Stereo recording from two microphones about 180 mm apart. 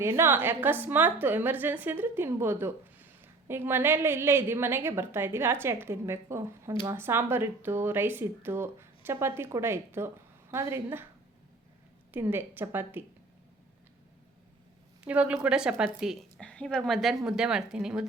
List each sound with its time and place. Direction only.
0.0 s a woman's voice: 15° right (ahead or behind)
12.1 s a woman's voice: 10° right (ahead or behind)
15.0 s a woman's voice: 5° right (ahead or behind)